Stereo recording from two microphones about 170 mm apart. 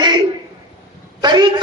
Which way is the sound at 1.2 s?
25° right (ahead or behind).